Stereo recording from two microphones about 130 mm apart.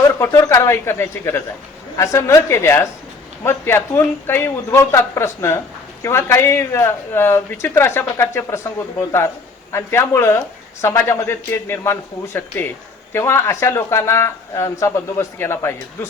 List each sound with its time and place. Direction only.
0.2 s speech: 20° left (ahead or behind)